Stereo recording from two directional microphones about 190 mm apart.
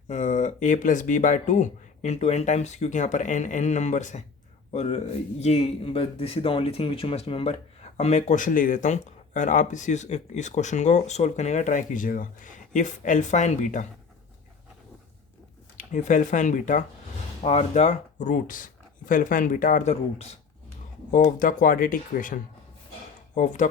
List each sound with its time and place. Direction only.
0.1 s speech: 40° left (ahead or behind)
15.9 s speech: 40° left (ahead or behind)
21.1 s speech: 45° left (ahead or behind)